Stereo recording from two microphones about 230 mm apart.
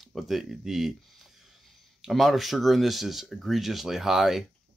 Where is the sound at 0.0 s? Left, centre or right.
Centre.